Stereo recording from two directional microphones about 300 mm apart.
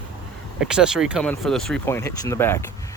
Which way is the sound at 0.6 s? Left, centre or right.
Centre.